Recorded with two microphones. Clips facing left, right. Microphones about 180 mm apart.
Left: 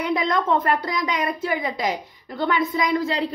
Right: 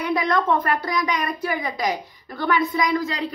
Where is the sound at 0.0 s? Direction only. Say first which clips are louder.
Right 1 dB; 20° left (ahead or behind).